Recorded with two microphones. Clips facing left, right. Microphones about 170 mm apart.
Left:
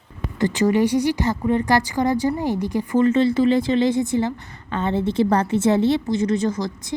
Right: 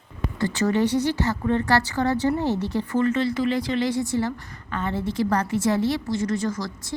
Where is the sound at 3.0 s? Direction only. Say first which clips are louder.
Left 6 dB; 25° left (ahead or behind).